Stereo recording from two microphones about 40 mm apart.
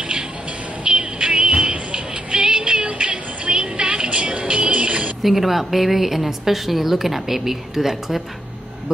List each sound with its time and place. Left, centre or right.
0.8 s music: right
2.8 s music: right
5.2 s a woman's voice: centre